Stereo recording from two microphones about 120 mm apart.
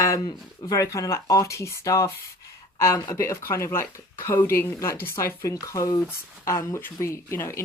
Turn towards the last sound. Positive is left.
turn(degrees=20)  # may be behind; listen again after turning